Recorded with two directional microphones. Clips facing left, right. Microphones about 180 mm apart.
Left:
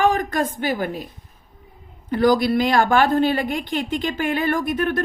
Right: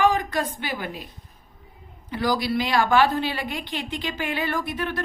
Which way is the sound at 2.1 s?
50° left (ahead or behind).